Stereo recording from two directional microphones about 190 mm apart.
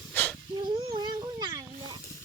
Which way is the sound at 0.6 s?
20° right (ahead or behind).